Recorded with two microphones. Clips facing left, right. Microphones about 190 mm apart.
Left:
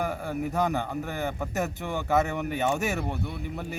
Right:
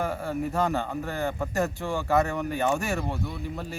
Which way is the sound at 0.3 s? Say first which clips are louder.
Even; 15° left (ahead or behind).